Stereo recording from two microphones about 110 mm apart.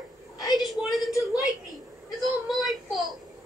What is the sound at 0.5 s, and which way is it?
Speech, centre (ahead or behind).